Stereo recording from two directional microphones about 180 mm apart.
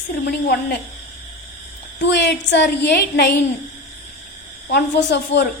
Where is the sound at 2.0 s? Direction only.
70° left (ahead or behind).